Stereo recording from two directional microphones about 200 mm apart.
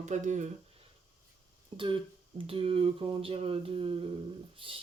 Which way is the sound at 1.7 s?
25° right (ahead or behind).